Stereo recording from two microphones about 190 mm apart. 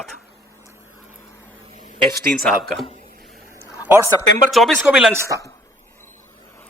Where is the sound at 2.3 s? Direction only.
5° left (ahead or behind).